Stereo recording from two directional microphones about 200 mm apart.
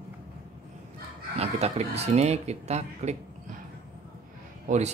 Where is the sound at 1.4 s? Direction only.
30° right (ahead or behind).